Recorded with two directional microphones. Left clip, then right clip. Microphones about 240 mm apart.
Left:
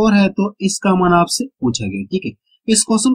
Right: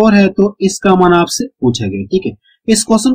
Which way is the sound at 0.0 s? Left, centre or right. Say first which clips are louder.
Right 6 dB; centre.